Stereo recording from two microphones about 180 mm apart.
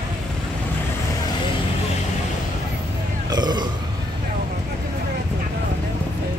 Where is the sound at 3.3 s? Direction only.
25° right (ahead or behind).